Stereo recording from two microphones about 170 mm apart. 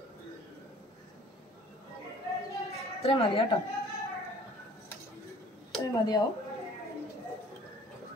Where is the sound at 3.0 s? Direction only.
35° left (ahead or behind).